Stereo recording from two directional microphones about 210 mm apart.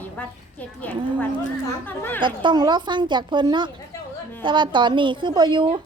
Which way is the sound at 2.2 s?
20° right (ahead or behind).